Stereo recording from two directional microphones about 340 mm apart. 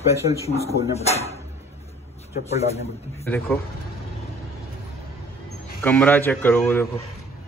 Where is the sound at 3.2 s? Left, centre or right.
Centre.